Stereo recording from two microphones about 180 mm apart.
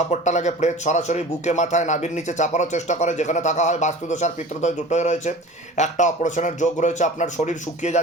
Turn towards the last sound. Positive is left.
turn(degrees=40)  # may be behind; listen again after turning